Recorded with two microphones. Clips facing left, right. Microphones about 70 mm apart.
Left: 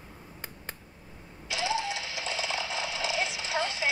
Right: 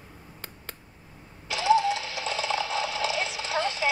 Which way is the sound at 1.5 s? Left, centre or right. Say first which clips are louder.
Right 8 dB; right.